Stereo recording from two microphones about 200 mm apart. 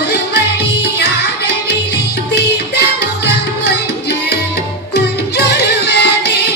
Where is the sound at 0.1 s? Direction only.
55° left (ahead or behind).